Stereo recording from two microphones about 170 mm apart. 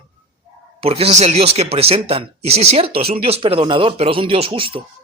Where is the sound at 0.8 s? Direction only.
35° right (ahead or behind).